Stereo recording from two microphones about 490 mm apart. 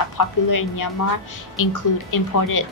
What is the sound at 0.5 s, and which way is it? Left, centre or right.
A woman's voice, left.